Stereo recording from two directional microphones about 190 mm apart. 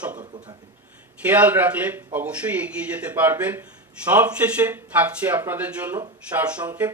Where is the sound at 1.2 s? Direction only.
10° right (ahead or behind).